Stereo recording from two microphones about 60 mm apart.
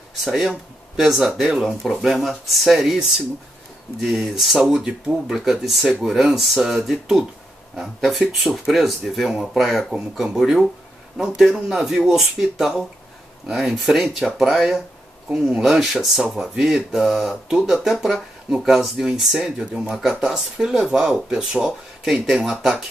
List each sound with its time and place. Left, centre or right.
0.2 s speech: centre
4.0 s speech: centre
20.0 s speech: centre